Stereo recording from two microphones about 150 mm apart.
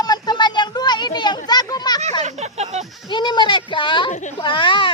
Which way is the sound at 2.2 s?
50° right (ahead or behind).